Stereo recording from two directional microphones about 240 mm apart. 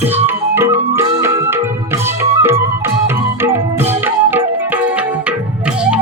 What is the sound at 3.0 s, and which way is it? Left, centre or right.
Music, centre.